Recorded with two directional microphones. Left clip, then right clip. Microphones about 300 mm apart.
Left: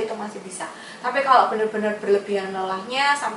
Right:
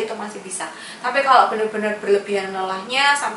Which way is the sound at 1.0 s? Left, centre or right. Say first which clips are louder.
Right 2 dB; centre.